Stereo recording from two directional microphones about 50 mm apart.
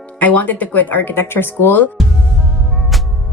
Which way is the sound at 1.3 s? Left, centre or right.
Left.